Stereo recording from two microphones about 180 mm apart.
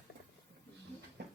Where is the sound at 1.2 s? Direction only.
70° right (ahead or behind).